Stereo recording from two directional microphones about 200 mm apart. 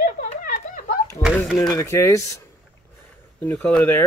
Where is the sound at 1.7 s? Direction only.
15° left (ahead or behind).